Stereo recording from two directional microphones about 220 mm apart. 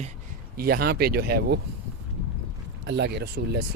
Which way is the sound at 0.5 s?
40° right (ahead or behind).